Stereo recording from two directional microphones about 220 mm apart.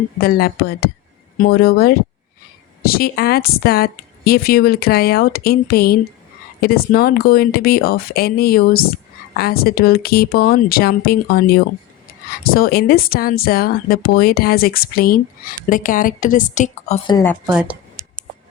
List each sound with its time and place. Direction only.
0.2 s speech: 45° left (ahead or behind)
17.1 s speech: 15° left (ahead or behind)
17.4 s speech: 5° right (ahead or behind)
18.0 s tick: 15° right (ahead or behind)